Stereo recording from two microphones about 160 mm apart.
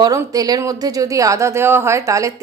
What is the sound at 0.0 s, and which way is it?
A woman's voice, 20° right (ahead or behind).